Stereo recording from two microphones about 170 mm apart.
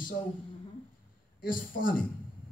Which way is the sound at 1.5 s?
55° left (ahead or behind).